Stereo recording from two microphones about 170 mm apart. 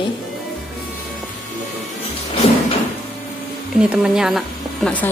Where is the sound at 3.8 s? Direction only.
5° right (ahead or behind).